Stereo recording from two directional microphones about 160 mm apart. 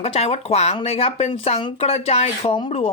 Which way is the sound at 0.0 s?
40° left (ahead or behind).